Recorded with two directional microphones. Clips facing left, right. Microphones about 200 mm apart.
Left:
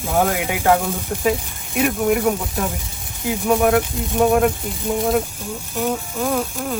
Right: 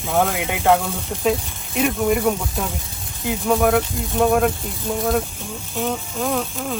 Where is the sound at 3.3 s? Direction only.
15° left (ahead or behind).